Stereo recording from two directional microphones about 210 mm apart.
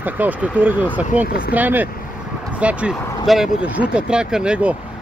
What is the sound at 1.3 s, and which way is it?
Speech, 45° left (ahead or behind).